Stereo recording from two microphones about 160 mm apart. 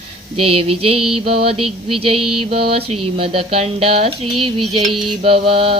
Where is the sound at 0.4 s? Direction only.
35° right (ahead or behind).